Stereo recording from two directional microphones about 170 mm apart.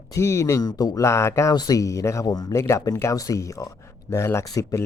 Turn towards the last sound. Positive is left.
turn(degrees=20)  # may be behind; listen again after turning